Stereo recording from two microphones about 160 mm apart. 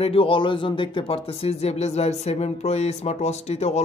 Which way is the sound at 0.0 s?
35° left (ahead or behind).